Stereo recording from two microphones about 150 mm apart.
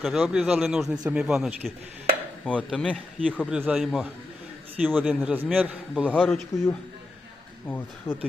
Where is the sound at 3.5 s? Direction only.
5° right (ahead or behind).